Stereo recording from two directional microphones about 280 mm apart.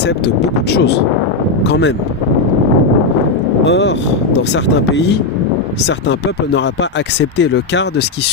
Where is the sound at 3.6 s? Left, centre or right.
Left.